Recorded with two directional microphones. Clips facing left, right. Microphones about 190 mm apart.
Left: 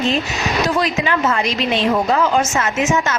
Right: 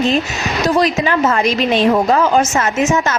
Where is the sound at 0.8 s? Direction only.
40° right (ahead or behind).